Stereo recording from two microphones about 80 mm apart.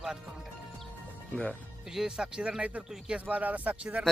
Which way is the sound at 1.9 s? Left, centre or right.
Centre.